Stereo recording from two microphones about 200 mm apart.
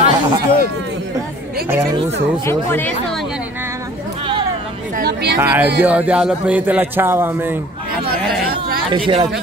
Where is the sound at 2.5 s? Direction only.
10° left (ahead or behind).